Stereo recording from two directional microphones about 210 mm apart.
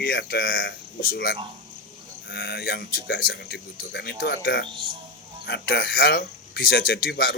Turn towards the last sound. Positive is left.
turn(degrees=45)  # may be behind; listen again after turning